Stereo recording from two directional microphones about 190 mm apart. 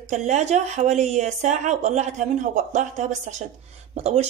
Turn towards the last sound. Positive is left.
turn(degrees=-30)  # may be behind; listen again after turning